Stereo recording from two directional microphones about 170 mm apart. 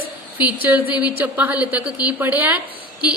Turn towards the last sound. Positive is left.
turn(degrees=-10)  # may be behind; listen again after turning